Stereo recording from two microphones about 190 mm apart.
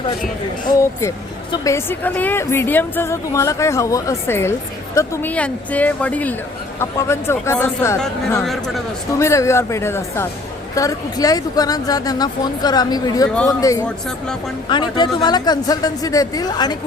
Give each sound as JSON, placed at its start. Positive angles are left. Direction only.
{"t": 1.6, "sound": "a woman's voice", "side_deg": 10}
{"t": 9.1, "sound": "a woman's voice", "side_deg": 15}